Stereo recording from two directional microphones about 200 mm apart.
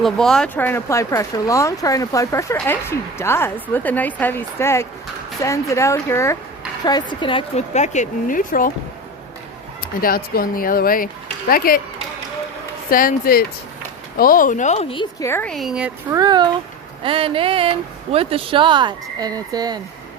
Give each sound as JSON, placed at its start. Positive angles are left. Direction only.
{"t": 0.0, "sound": "a woman's voice", "side_deg": 0}
{"t": 10.0, "sound": "speech", "side_deg": 45}
{"t": 12.9, "sound": "a woman's voice", "side_deg": 45}
{"t": 15.2, "sound": "speech", "side_deg": 10}
{"t": 15.5, "sound": "speech", "side_deg": -5}
{"t": 16.1, "sound": "speech", "side_deg": -20}